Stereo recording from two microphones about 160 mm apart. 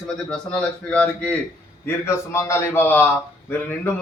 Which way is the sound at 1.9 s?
15° left (ahead or behind).